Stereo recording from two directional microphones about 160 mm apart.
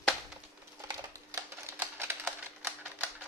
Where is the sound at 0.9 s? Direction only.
15° right (ahead or behind).